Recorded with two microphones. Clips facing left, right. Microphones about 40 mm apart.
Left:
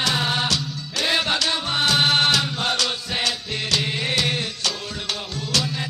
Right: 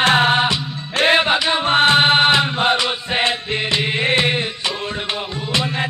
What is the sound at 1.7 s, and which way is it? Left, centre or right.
Chant, right.